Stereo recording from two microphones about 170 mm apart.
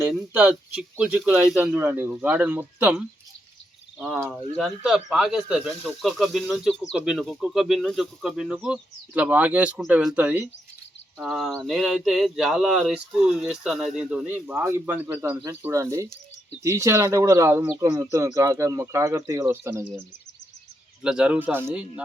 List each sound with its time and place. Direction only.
0.0 s speech: 5° right (ahead or behind)